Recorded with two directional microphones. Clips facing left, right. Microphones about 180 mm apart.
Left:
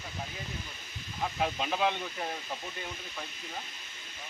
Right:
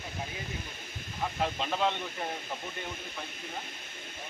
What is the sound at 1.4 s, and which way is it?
Speech, 10° left (ahead or behind).